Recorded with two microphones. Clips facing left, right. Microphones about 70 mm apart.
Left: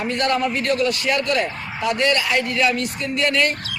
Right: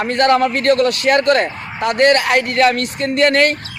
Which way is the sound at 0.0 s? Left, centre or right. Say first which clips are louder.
Right 7 dB; right.